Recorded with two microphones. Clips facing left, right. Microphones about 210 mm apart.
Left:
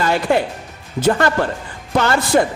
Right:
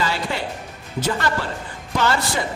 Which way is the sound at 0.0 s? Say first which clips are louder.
Left 8 dB; 55° left (ahead or behind).